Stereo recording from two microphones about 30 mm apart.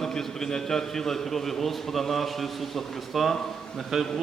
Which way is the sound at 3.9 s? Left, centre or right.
Centre.